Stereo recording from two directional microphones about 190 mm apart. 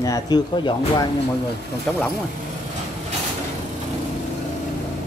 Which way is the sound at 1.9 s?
5° left (ahead or behind).